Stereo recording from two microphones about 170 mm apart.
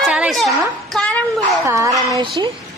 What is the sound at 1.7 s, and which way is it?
Speech, 20° right (ahead or behind).